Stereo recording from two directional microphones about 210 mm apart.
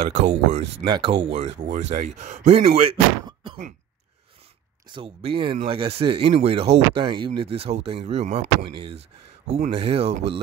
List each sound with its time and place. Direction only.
0.0 s speech: 30° right (ahead or behind)
4.8 s speech: 25° right (ahead or behind)
9.6 s speech: 30° right (ahead or behind)